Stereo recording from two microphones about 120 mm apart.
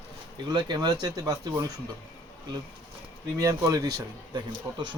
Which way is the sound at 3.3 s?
30° right (ahead or behind).